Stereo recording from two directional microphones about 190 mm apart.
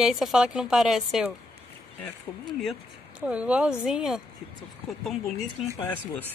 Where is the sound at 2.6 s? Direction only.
Centre (ahead or behind).